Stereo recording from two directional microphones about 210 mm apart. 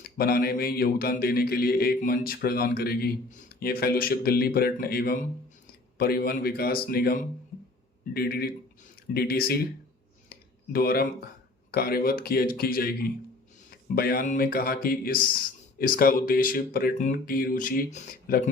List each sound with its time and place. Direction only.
0.0 s speech: 45° left (ahead or behind)
10.2 s a sound: 45° left (ahead or behind)
11.7 s speech: 45° left (ahead or behind)